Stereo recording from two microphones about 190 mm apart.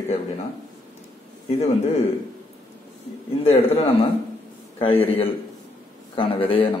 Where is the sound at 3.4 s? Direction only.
30° left (ahead or behind).